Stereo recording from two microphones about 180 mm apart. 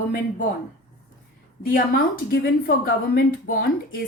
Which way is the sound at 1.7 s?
55° left (ahead or behind).